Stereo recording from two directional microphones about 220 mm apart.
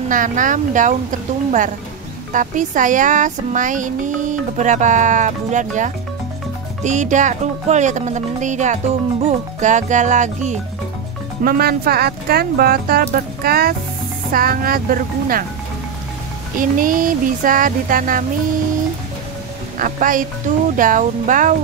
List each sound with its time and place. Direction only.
0.1 s speech: 35° right (ahead or behind)
2.3 s speech: 35° right (ahead or behind)
16.5 s speech: 40° right (ahead or behind)
19.8 s speech: 35° right (ahead or behind)